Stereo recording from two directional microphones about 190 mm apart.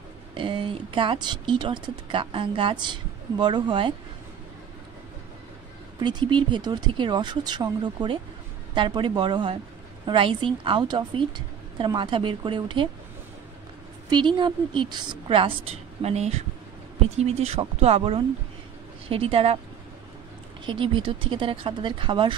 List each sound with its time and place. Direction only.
0.3 s speech: 25° right (ahead or behind)
5.9 s speech: 25° right (ahead or behind)
14.0 s speech: 25° right (ahead or behind)
20.6 s speech: 25° right (ahead or behind)